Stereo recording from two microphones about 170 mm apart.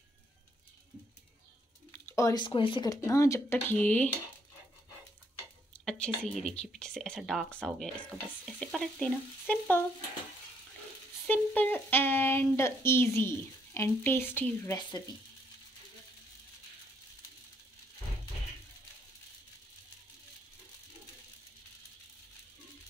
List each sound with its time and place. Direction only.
1.9 s speech: 20° left (ahead or behind)
5.7 s a sound: 5° left (ahead or behind)
6.3 s speech: 5° left (ahead or behind)
11.2 s speech: 10° left (ahead or behind)
14.8 s speech: 25° left (ahead or behind)